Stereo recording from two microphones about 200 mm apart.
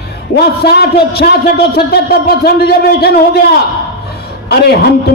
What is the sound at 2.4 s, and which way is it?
A man's voice, 50° left (ahead or behind).